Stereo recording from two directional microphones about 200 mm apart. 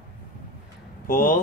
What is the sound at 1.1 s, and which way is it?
Speech, 40° left (ahead or behind).